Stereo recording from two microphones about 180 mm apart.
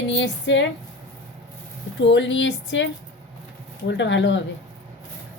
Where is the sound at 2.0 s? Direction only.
85° left.